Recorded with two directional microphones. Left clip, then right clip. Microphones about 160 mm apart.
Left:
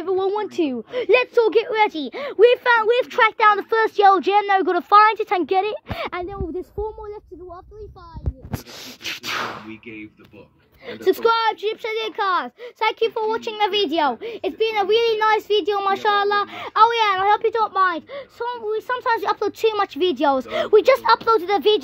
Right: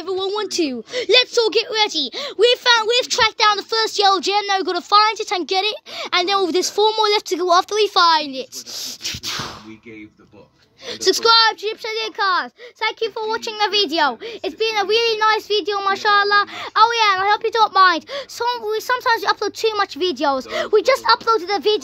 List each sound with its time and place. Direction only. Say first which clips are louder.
0.0 s a sound: left 1 dB; centre (ahead or behind)
0.4 s speech: right 2 dB; 15° right (ahead or behind)
6.4 s speech: right 11 dB; 20° right (ahead or behind)
8.7 s speech: right 4 dB; centre (ahead or behind)
11.1 s speech: right 4 dB; centre (ahead or behind)
17.6 s speech: right 6 dB; 30° right (ahead or behind)
18.8 s speech: right 2 dB; 10° right (ahead or behind)